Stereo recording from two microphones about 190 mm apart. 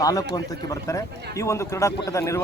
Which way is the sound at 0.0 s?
20° left (ahead or behind).